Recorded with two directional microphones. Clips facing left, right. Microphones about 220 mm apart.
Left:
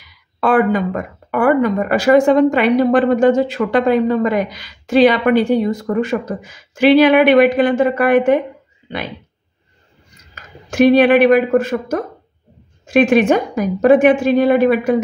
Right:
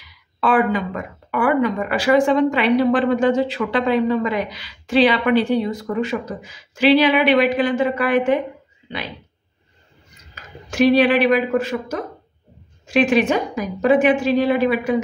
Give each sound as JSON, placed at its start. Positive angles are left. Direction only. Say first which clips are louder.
{"t": 0.4, "sound": "speech", "louder": "left 4 dB", "side_deg": 50}
{"t": 10.7, "sound": "speech", "louder": "left 4 dB", "side_deg": 50}